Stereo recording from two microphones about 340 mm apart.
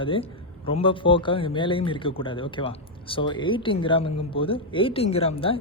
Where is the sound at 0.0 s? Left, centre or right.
Centre.